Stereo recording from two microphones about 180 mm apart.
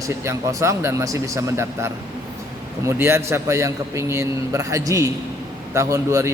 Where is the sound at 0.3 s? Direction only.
15° right (ahead or behind).